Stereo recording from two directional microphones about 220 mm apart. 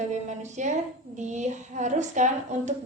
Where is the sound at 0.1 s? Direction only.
35° right (ahead or behind).